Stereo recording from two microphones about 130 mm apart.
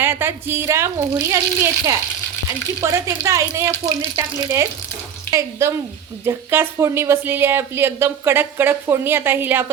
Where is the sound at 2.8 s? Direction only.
20° right (ahead or behind).